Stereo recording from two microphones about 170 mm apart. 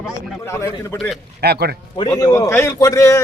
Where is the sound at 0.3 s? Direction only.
15° left (ahead or behind).